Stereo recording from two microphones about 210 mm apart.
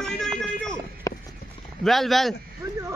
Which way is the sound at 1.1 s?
15° left (ahead or behind).